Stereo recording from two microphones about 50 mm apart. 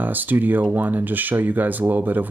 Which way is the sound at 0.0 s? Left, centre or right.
Right.